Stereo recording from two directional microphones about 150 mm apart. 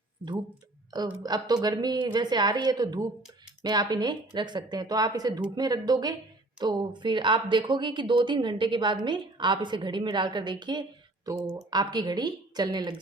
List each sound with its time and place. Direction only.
0.9 s a woman's voice: 25° right (ahead or behind)